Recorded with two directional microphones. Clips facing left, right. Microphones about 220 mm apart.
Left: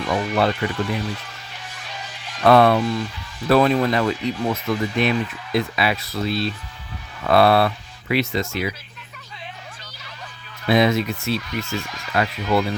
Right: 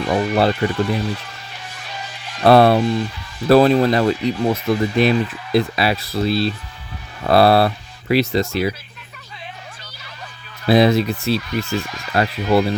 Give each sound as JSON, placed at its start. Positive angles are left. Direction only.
{"t": 0.0, "sound": "speech", "side_deg": -35}
{"t": 2.4, "sound": "speech", "side_deg": -35}
{"t": 10.7, "sound": "speech", "side_deg": -35}